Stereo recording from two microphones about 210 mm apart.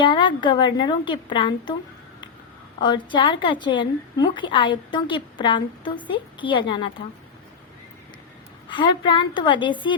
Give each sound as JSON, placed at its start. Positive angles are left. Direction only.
{"t": 0.0, "sound": "a woman's voice", "side_deg": 25}
{"t": 2.8, "sound": "a woman's voice", "side_deg": 20}
{"t": 8.7, "sound": "a woman's voice", "side_deg": 20}